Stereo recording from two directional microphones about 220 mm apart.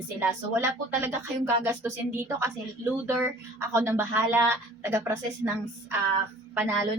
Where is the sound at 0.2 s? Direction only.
10° right (ahead or behind).